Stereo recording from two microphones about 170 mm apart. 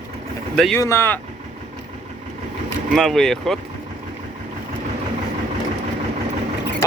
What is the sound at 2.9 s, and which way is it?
Speech, centre (ahead or behind).